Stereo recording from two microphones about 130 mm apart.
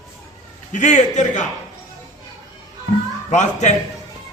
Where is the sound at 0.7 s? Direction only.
70° left (ahead or behind).